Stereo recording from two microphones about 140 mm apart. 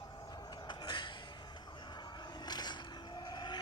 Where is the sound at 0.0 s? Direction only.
30° left (ahead or behind).